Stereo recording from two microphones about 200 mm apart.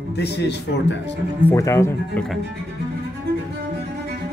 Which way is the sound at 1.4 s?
15° left (ahead or behind).